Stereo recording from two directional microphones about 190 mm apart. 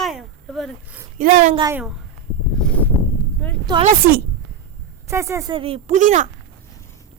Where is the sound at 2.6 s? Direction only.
5° left (ahead or behind).